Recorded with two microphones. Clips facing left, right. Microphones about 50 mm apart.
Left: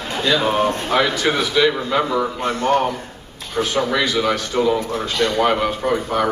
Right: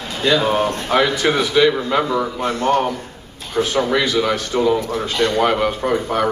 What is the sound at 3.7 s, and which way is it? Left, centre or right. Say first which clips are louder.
Speech: right 1 dB; centre.